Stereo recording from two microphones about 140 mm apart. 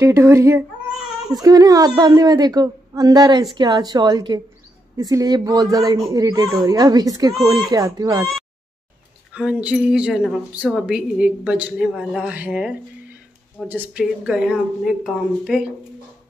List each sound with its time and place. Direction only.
0.0 s a woman's voice: 20° right (ahead or behind)
9.3 s a woman's voice: 10° right (ahead or behind)